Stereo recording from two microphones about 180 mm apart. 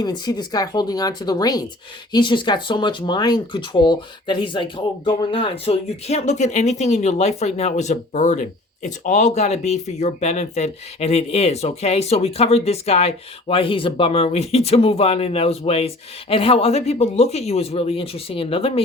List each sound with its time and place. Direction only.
0.0 s speech: 25° left (ahead or behind)